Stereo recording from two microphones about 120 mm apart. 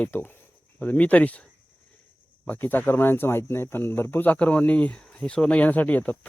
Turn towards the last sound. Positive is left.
turn(degrees=15)  # may be behind; listen again after turning